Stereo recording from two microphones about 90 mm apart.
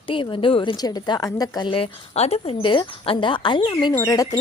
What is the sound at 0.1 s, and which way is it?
Speech, 70° left (ahead or behind).